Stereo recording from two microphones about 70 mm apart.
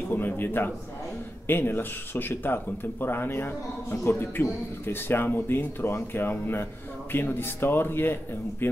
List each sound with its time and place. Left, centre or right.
0.1 s a man's voice: left